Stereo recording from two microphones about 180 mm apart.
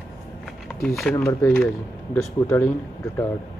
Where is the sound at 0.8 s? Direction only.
Centre (ahead or behind).